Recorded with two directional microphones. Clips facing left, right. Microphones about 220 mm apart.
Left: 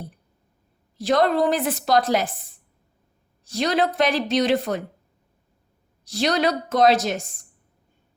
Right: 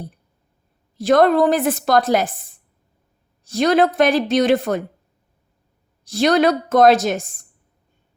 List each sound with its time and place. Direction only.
0.9 s a woman's voice: 50° right (ahead or behind)
3.4 s a woman's voice: 50° right (ahead or behind)
6.1 s a woman's voice: 50° right (ahead or behind)